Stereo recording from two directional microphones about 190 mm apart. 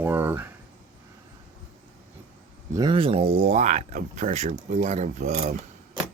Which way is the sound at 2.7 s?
25° right (ahead or behind).